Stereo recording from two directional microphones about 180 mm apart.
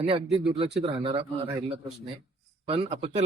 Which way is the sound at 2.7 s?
35° right (ahead or behind).